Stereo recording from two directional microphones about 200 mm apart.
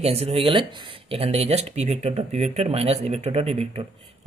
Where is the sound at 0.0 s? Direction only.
30° right (ahead or behind).